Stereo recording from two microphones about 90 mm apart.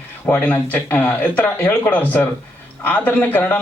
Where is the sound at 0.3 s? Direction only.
20° left (ahead or behind).